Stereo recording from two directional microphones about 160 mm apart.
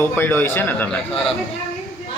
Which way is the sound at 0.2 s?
15° left (ahead or behind).